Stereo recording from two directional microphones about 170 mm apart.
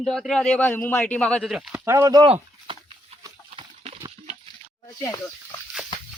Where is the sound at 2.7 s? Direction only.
30° right (ahead or behind).